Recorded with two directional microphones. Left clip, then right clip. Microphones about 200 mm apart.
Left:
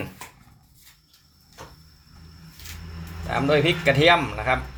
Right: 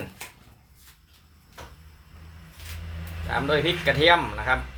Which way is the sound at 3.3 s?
5° left (ahead or behind).